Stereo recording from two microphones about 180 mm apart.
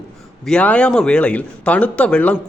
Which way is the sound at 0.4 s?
5° left (ahead or behind).